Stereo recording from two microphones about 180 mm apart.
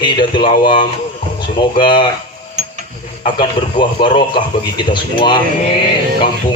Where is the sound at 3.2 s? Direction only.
25° left (ahead or behind).